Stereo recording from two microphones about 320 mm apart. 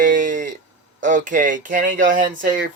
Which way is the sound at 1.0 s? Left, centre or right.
Right.